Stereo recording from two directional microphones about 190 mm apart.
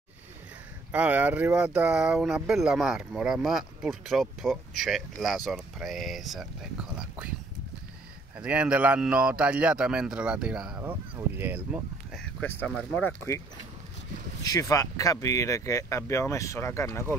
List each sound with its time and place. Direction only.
0.9 s speech: 5° right (ahead or behind)
8.4 s speech: 5° right (ahead or behind)
12.2 s speech: 5° left (ahead or behind)
14.4 s speech: 20° left (ahead or behind)